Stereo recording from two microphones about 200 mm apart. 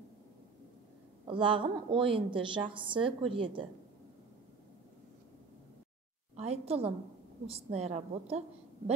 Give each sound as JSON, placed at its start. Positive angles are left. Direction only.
{"t": 1.2, "sound": "a woman's voice", "side_deg": -25}
{"t": 6.3, "sound": "a woman's voice", "side_deg": -30}